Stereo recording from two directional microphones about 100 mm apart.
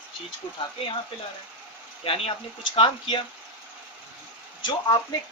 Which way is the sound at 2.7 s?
55° left (ahead or behind).